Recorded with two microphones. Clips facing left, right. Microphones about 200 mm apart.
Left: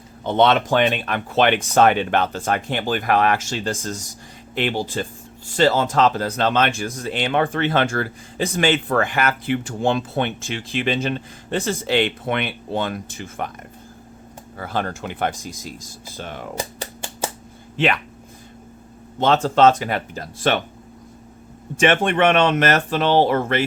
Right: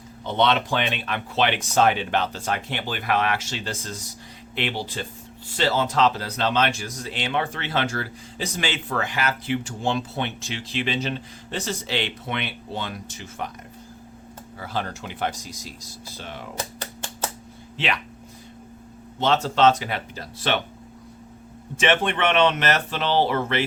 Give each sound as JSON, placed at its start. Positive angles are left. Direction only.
{"t": 0.3, "sound": "speech", "side_deg": 50}
{"t": 14.6, "sound": "speech", "side_deg": 55}
{"t": 16.6, "sound": "typewriter", "side_deg": 10}
{"t": 17.7, "sound": "speech", "side_deg": 50}
{"t": 19.2, "sound": "speech", "side_deg": 50}
{"t": 21.8, "sound": "speech", "side_deg": 45}